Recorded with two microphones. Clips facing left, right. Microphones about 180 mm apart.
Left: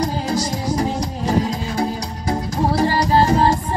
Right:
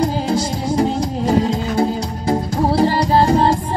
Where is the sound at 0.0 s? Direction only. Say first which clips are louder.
Right 3 dB; 30° right (ahead or behind).